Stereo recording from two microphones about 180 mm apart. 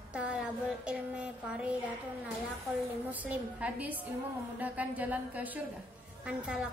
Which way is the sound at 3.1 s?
10° right (ahead or behind).